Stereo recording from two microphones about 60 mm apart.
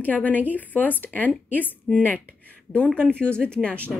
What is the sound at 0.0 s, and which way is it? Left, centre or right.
A woman's voice, left.